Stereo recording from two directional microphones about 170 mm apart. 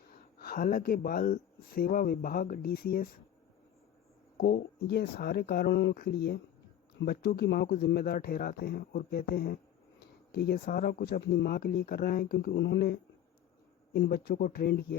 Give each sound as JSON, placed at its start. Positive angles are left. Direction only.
{"t": 0.1, "sound": "speech", "side_deg": 60}
{"t": 4.4, "sound": "speech", "side_deg": 65}